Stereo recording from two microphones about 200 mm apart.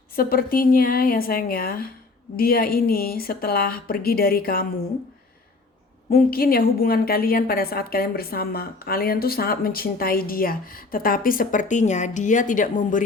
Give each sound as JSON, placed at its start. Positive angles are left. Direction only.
{"t": 0.2, "sound": "a woman's voice", "side_deg": 50}
{"t": 6.1, "sound": "a woman's voice", "side_deg": 50}